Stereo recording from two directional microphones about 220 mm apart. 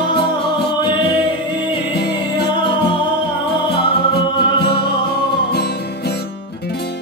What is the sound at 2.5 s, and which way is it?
Music, 20° left (ahead or behind).